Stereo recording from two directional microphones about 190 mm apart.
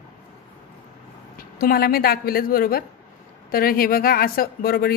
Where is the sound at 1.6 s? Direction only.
50° left (ahead or behind).